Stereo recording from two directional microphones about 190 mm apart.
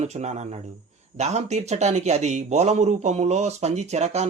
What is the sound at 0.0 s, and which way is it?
A man's voice, 35° right (ahead or behind).